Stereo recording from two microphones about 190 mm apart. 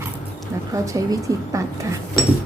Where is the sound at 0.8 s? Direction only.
15° right (ahead or behind).